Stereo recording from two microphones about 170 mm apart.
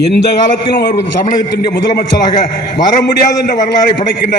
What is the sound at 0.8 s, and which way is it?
Speech, 65° left (ahead or behind).